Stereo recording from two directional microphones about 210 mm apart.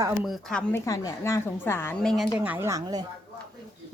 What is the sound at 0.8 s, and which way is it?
A woman's voice, 15° left (ahead or behind).